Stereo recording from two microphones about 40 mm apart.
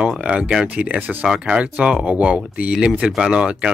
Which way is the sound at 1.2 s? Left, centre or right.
Centre.